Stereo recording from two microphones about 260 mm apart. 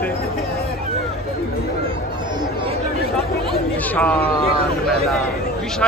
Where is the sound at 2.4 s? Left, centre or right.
Centre.